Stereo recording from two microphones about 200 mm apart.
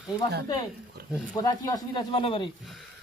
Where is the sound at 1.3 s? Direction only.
20° left (ahead or behind).